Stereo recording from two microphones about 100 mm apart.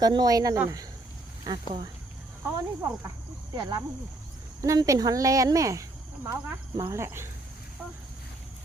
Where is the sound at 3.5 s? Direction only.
40° right (ahead or behind).